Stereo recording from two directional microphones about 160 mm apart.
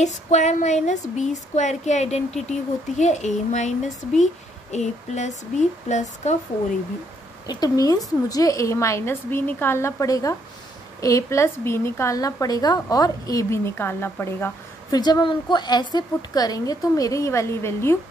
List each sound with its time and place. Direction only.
0.0 s speech: 45° left (ahead or behind)
7.4 s a woman's voice: 25° left (ahead or behind)